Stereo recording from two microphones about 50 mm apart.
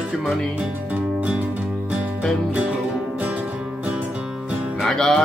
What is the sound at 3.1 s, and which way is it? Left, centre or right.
Music, right.